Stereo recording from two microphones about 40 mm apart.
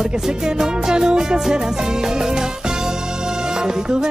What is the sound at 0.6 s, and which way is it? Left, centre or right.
Music, centre.